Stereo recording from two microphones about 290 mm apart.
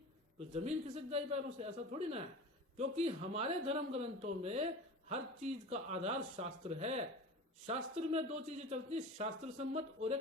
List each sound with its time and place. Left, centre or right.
0.3 s speech: right